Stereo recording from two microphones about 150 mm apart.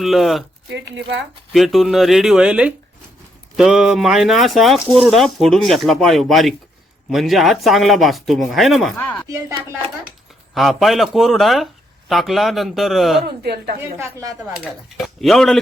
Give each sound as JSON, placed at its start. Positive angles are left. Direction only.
{"t": 0.0, "sound": "speech", "side_deg": 0}
{"t": 1.5, "sound": "speech", "side_deg": 0}
{"t": 9.0, "sound": "speech", "side_deg": 10}
{"t": 10.5, "sound": "speech", "side_deg": 0}
{"t": 14.2, "sound": "speech", "side_deg": -20}
{"t": 14.6, "sound": "speech", "side_deg": 0}